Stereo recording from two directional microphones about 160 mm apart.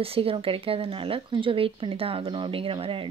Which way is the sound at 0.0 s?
35° right (ahead or behind).